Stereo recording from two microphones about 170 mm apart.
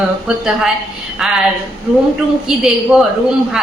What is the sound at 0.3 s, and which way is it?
A man's voice, 5° right (ahead or behind).